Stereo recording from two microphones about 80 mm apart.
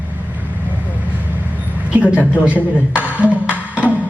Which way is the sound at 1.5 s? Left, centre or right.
Centre.